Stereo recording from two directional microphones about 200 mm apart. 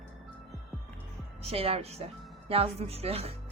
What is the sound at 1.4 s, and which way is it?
A woman's voice, 30° right (ahead or behind).